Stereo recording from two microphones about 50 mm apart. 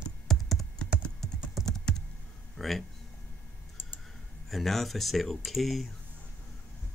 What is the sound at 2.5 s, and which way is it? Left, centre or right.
Speech, centre.